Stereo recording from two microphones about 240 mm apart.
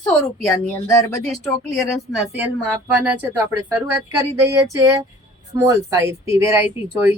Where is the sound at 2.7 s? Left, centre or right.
Centre.